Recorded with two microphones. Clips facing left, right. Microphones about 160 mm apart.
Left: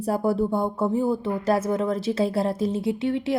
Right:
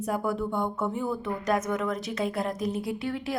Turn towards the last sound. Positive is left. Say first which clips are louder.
# left 7 dB
turn(degrees=25)  # may be behind; listen again after turning